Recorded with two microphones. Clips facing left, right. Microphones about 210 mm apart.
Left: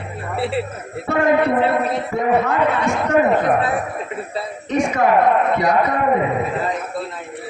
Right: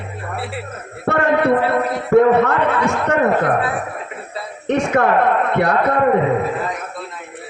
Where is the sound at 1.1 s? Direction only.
65° right (ahead or behind).